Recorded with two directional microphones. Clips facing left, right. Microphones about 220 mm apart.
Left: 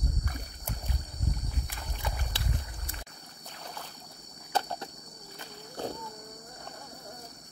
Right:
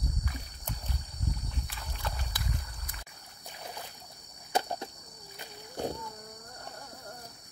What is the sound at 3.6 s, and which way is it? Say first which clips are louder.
Boat: right 1 dB; 15° right (ahead or behind).